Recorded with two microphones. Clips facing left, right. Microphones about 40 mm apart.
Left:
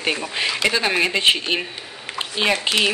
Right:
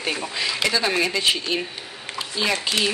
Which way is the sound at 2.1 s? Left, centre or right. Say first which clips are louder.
Left 3 dB; left.